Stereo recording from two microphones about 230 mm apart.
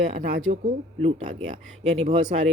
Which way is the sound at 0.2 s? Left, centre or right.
Right.